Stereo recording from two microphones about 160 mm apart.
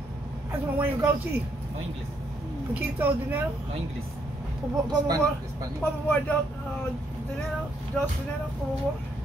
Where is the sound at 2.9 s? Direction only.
10° right (ahead or behind).